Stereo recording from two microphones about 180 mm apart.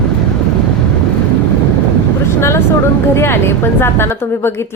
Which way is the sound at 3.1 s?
15° left (ahead or behind).